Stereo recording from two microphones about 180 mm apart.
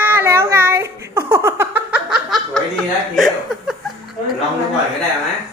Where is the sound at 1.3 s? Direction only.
15° right (ahead or behind).